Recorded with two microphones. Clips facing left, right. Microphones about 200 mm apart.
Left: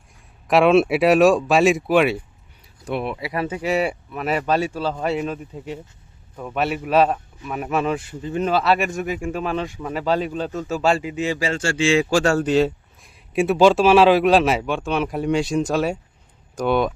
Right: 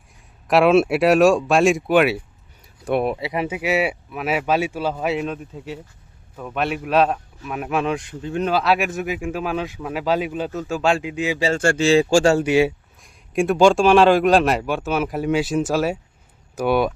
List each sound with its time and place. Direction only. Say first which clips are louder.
0.4 s a man's voice: even; centre (ahead or behind)
2.8 s speech: right 5 dB; 45° right (ahead or behind)
3.2 s a man's voice: right 1 dB; 25° right (ahead or behind)
3.4 s a man's voice: even; 10° right (ahead or behind)
11.5 s speech: right 3 dB; 50° right (ahead or behind)
11.9 s a man's voice: right 3 dB; 30° right (ahead or behind)
12.4 s speech: right 1 dB; 10° right (ahead or behind)
13.0 s a man's voice: even; centre (ahead or behind)